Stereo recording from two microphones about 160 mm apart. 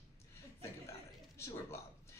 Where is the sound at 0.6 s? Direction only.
15° left (ahead or behind).